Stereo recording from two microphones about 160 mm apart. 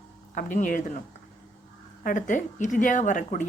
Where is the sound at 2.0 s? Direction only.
55° left (ahead or behind).